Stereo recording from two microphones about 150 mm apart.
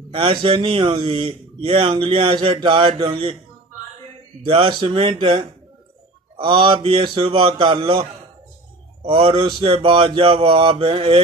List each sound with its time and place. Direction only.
0.1 s a man's voice: 35° right (ahead or behind)
4.5 s a man's voice: 35° right (ahead or behind)